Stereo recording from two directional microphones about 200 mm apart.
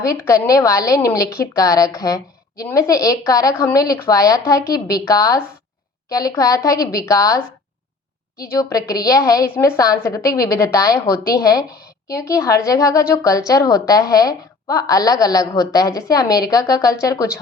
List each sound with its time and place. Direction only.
0.0 s a woman's voice: 15° left (ahead or behind)
8.5 s a woman's voice: 15° left (ahead or behind)